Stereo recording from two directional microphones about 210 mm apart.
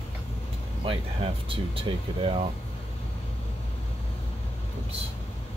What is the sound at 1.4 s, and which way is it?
Speech, 25° right (ahead or behind).